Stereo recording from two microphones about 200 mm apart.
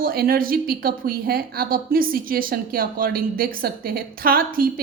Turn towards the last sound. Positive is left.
turn(degrees=-45)  # may be behind; listen again after turning